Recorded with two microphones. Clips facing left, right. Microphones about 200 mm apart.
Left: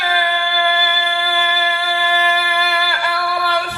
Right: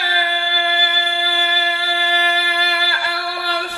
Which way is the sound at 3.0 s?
55° left (ahead or behind).